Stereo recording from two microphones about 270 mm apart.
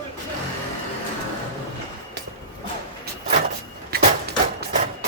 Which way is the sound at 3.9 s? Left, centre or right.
Right.